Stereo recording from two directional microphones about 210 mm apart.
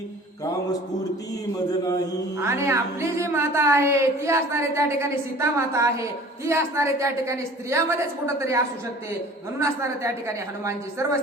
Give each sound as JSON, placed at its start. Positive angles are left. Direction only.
{"t": 2.4, "sound": "a woman's voice", "side_deg": -10}